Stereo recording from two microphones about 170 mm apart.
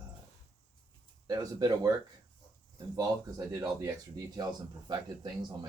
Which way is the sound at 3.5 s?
20° right (ahead or behind).